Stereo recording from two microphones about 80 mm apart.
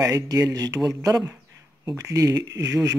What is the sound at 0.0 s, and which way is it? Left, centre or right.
Speech, right.